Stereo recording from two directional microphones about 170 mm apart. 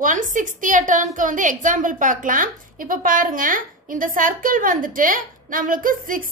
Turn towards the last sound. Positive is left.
turn(degrees=-55)  # may be behind; listen again after turning